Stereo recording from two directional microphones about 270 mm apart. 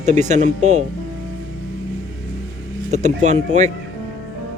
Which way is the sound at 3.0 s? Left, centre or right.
Right.